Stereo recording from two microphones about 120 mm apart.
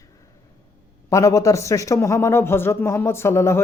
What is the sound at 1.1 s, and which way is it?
Speech, 25° left (ahead or behind).